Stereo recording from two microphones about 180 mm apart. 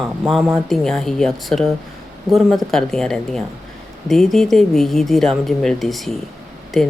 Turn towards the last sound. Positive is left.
turn(degrees=0)  # may be behind; listen again after turning